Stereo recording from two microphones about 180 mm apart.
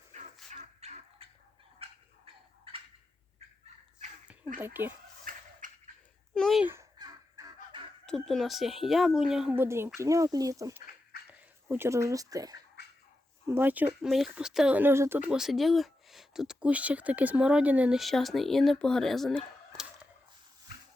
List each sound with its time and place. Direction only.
0.1 s dog: 40° right (ahead or behind)
0.5 s fowl: 40° right (ahead or behind)
1.8 s turkey: 30° right (ahead or behind)
4.6 s speech: 10° right (ahead or behind)
5.2 s turkey: 45° right (ahead or behind)
6.3 s a sound: centre (ahead or behind)
6.7 s a sound: 20° right (ahead or behind)
8.0 s speech: centre (ahead or behind)